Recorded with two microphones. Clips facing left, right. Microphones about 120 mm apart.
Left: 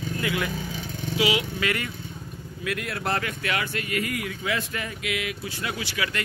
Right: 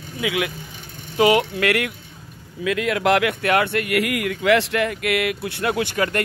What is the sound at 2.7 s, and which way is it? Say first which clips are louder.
Speech: right 11 dB; 90° right.